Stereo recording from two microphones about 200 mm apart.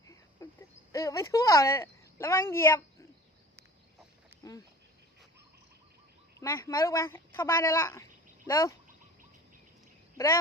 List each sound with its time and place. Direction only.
0.4 s a sound: 15° left (ahead or behind)
0.9 s speech: 15° left (ahead or behind)
6.4 s speech: 15° left (ahead or behind)